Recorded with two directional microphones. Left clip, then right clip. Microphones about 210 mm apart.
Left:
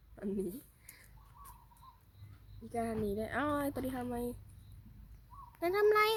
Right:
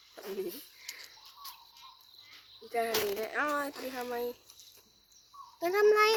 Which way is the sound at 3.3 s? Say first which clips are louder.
Right 2 dB; 10° left (ahead or behind).